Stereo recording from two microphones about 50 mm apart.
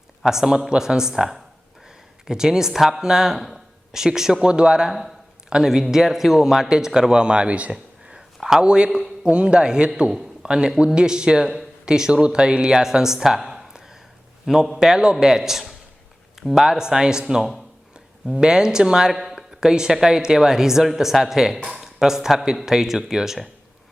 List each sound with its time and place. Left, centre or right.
0.2 s speech: centre
4.9 s a man's voice: centre; by 7.8 s right
8.1 s a sound: centre
8.6 s a man's voice: centre
10.1 s a sound: centre
10.9 s speech: centre
16.6 s speech: centre
19.1 s speech: centre